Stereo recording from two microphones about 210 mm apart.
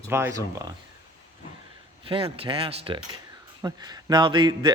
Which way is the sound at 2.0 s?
25° right (ahead or behind).